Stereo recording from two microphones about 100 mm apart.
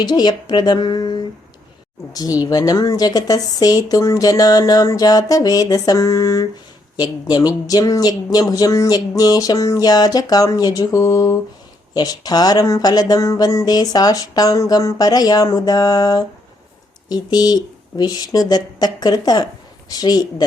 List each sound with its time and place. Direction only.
0.0 s a woman's voice: 45° left (ahead or behind)